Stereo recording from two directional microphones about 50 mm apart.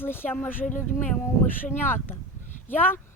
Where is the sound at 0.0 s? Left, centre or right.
Left.